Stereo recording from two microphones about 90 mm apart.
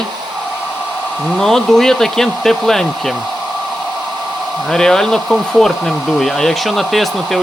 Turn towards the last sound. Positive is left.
turn(degrees=0)  # may be behind; listen again after turning